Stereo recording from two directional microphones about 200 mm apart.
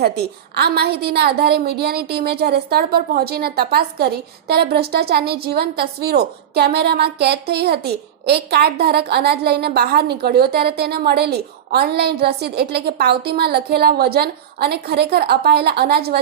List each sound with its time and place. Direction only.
0.5 s a woman's voice: 55° right (ahead or behind)